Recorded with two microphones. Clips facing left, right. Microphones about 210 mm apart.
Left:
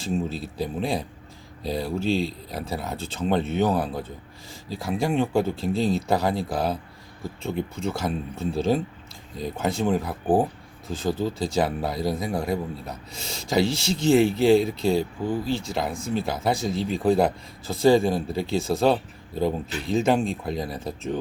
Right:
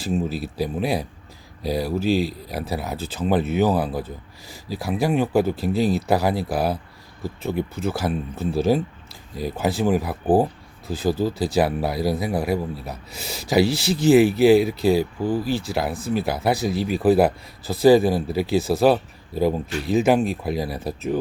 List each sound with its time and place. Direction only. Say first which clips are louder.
0.0 s speech: right 3 dB; 5° right (ahead or behind)